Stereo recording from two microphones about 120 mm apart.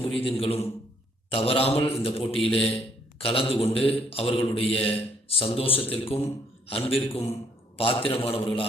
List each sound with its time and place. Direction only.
0.3 s a man's voice: 55° left (ahead or behind)